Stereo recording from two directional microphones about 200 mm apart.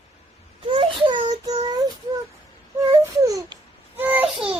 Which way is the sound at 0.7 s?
25° right (ahead or behind).